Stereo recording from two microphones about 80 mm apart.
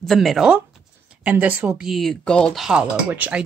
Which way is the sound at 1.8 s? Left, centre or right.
Centre.